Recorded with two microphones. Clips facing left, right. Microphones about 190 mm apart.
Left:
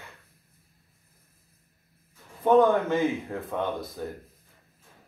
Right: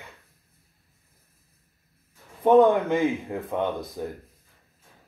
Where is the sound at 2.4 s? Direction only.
20° right (ahead or behind).